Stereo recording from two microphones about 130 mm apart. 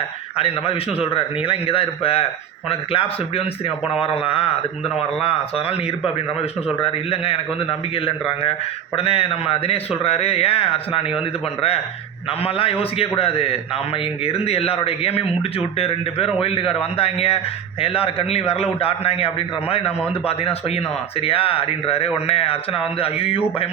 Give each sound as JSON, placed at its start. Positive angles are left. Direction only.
{"t": 0.3, "sound": "a man's voice", "side_deg": 50}
{"t": 6.8, "sound": "a man's voice", "side_deg": 45}
{"t": 9.0, "sound": "a man's voice", "side_deg": 45}
{"t": 12.5, "sound": "a man's voice", "side_deg": 45}